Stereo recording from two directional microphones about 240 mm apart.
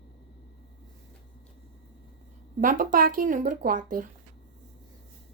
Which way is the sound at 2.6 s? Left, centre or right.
Right.